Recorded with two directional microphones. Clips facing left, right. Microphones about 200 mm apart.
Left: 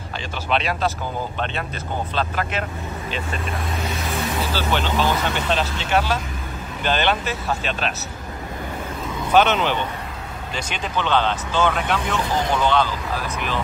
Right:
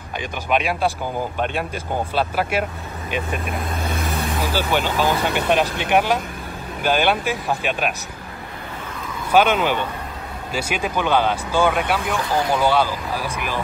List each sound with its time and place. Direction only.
0.5 s speech: 10° right (ahead or behind)
3.4 s speech: 55° right (ahead or behind)
4.4 s speech: 10° right (ahead or behind)
9.3 s speech: 10° right (ahead or behind)